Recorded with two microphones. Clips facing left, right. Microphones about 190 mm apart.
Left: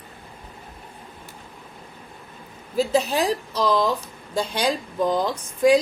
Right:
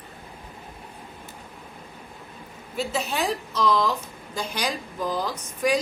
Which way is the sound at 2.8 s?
35° left (ahead or behind).